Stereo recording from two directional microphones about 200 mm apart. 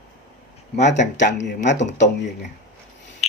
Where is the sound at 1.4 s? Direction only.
60° left (ahead or behind).